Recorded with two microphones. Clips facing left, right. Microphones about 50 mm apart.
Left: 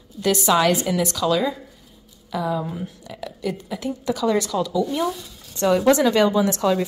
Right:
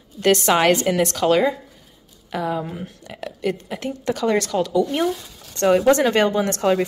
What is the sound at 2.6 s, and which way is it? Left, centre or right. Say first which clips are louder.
Speech: left 1 dB; right.